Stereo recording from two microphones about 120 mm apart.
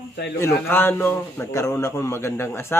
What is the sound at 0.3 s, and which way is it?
A man's voice, 20° left (ahead or behind).